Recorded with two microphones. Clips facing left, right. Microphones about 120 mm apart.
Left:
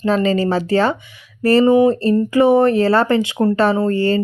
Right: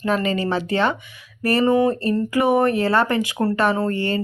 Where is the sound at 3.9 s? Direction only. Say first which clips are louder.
Left 6 dB; 35° left (ahead or behind).